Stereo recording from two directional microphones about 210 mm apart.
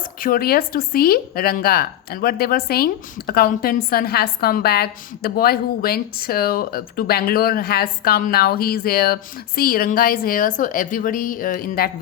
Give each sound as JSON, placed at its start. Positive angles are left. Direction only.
{"t": 0.2, "sound": "a woman's voice", "side_deg": 45}